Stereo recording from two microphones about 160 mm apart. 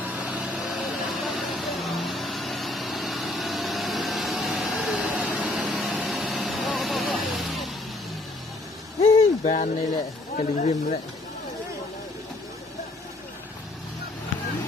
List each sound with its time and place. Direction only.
0.2 s vehicle: 10° right (ahead or behind)
9.0 s a sound: 50° left (ahead or behind)
10.3 s speech: 45° left (ahead or behind)